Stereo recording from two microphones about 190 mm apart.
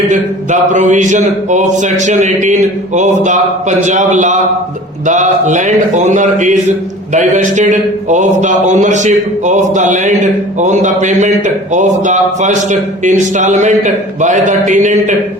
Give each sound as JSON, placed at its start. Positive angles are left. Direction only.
{"t": 0.1, "sound": "a man's voice", "side_deg": -40}